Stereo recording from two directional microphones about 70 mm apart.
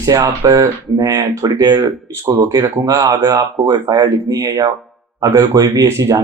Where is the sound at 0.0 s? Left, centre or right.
Right.